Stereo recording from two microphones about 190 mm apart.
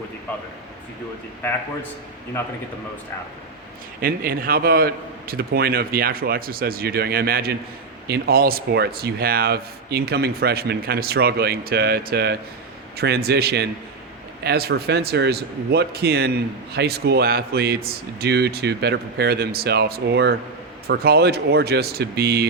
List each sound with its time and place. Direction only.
4.0 s a man's voice: 50° right (ahead or behind)